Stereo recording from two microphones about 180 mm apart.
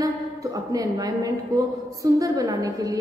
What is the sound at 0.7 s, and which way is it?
A woman's voice, 20° right (ahead or behind).